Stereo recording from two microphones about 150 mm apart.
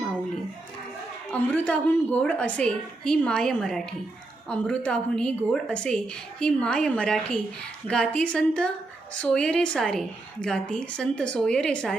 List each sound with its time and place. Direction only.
1.3 s a woman's voice: 10° left (ahead or behind)